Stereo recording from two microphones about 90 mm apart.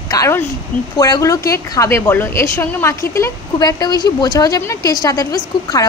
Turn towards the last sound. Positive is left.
turn(degrees=45)  # may be behind; listen again after turning